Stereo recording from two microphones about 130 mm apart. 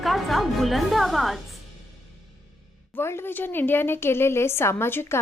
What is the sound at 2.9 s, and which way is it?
A woman's voice, 20° left (ahead or behind).